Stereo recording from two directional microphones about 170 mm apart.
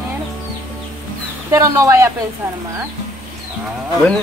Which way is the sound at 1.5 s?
15° right (ahead or behind).